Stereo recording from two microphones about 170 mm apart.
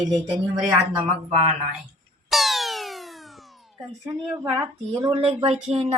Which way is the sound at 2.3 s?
Centre (ahead or behind).